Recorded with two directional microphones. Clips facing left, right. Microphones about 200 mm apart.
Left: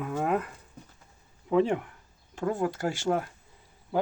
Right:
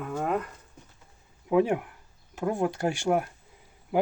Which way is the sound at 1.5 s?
10° right (ahead or behind).